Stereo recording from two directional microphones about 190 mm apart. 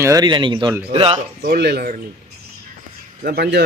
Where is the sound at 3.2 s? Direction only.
55° right (ahead or behind).